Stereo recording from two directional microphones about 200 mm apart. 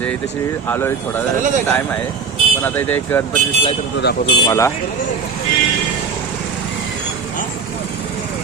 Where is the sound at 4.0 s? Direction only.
55° left (ahead or behind).